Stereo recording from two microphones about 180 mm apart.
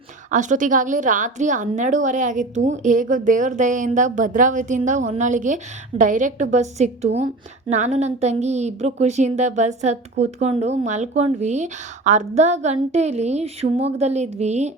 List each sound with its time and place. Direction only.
0.3 s a woman's voice: 45° right (ahead or behind)